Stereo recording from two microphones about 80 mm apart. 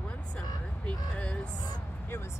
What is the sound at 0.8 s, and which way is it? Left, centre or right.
Speech, centre.